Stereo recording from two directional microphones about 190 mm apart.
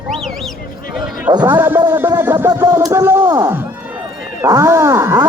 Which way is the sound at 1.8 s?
20° right (ahead or behind).